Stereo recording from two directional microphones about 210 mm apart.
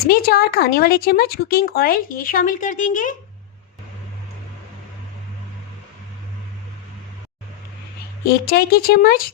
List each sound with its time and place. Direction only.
0.0 s speech: 45° left (ahead or behind)
8.2 s speech: 45° left (ahead or behind)